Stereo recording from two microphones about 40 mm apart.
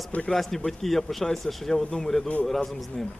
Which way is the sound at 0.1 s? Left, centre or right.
Left.